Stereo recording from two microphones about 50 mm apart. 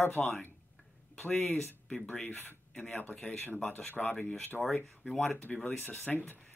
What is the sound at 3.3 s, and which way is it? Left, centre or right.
Speech, left.